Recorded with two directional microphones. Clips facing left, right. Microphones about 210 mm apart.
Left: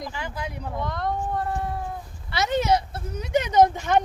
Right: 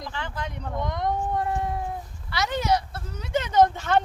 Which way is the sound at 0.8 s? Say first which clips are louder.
Right 1 dB; 20° right (ahead or behind).